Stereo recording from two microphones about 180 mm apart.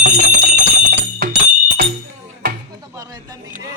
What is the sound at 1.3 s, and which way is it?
Music, 65° right (ahead or behind).